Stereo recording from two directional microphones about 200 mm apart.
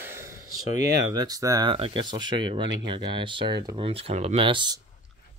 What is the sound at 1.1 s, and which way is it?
Speech, 20° right (ahead or behind).